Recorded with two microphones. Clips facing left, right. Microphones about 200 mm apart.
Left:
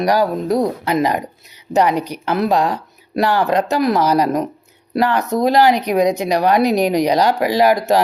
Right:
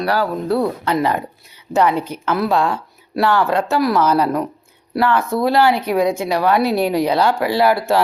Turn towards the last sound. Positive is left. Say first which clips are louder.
# left 2 dB
turn(degrees=15)  # may be behind; listen again after turning